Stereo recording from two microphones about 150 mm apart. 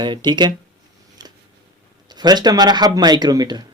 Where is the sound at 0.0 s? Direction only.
30° right (ahead or behind).